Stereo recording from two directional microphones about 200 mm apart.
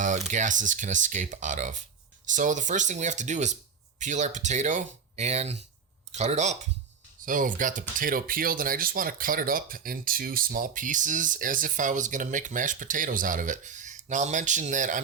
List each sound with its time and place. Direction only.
0.3 s speech: 40° right (ahead or behind)